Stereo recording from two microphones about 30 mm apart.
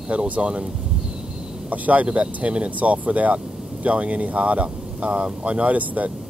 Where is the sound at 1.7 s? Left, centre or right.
Right.